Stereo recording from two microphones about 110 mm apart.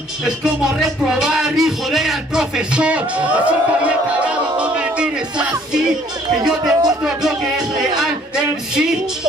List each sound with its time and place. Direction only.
0.4 s music: 5° right (ahead or behind)
3.4 s a sound: 10° right (ahead or behind)
6.6 s speech: 35° right (ahead or behind)
7.2 s music: centre (ahead or behind)